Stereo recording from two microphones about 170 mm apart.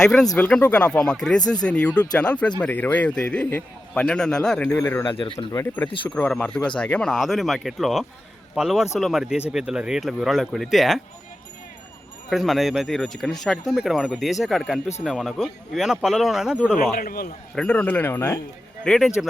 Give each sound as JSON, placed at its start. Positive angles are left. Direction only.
{"t": 0.0, "sound": "a man's voice", "side_deg": 5}
{"t": 4.8, "sound": "a man's voice", "side_deg": 15}
{"t": 5.1, "sound": "speech", "side_deg": 30}
{"t": 5.5, "sound": "a man's voice", "side_deg": 15}
{"t": 12.3, "sound": "speech", "side_deg": 0}
{"t": 16.9, "sound": "a man's voice", "side_deg": 60}
{"t": 17.5, "sound": "a man's voice", "side_deg": 5}
{"t": 18.9, "sound": "speech", "side_deg": 0}